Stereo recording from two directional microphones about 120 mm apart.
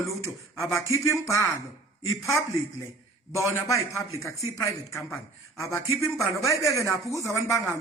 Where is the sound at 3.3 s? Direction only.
25° left (ahead or behind).